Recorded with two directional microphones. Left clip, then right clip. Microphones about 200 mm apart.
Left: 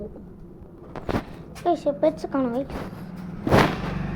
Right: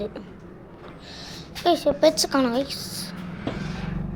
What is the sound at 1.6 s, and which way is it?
A woman's voice, 10° right (ahead or behind).